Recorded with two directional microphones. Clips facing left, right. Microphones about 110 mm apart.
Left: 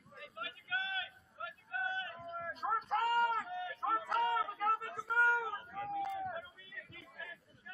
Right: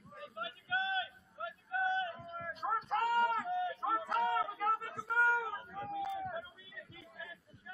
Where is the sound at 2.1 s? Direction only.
Centre (ahead or behind).